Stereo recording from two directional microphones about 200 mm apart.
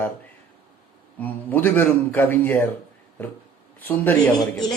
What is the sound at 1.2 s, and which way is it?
Speech, 10° left (ahead or behind).